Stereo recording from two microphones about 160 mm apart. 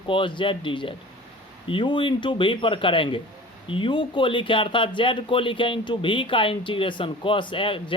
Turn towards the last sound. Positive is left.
turn(degrees=35)  # may be behind; listen again after turning